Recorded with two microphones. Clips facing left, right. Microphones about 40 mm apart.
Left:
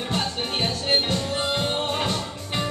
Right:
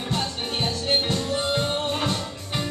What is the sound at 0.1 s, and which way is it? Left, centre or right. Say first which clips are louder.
Music: left 1 dB; left.